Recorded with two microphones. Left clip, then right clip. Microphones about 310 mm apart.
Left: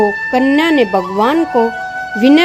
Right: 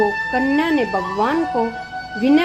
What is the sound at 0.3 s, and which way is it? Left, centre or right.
Speech, left.